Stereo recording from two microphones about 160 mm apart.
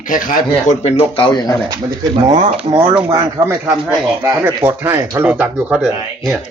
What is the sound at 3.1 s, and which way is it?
Speech, 20° right (ahead or behind).